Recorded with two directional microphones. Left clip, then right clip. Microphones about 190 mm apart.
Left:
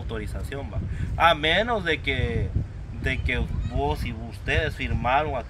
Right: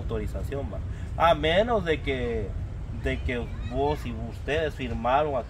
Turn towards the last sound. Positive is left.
turn(degrees=-15)  # may be behind; listen again after turning